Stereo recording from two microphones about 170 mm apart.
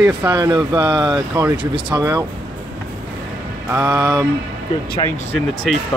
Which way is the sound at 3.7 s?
20° right (ahead or behind).